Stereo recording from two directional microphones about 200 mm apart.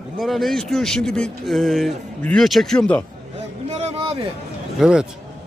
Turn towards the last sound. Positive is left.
turn(degrees=-5)  # may be behind; listen again after turning